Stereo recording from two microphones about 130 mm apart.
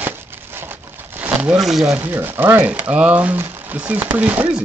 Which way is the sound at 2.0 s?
15° right (ahead or behind).